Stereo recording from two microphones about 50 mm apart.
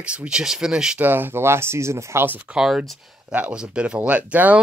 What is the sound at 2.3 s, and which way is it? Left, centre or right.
Speech, right.